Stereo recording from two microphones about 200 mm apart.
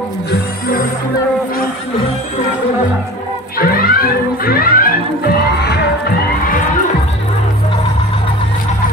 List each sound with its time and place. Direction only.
0.3 s music: 45° left (ahead or behind)
3.5 s music: 45° left (ahead or behind)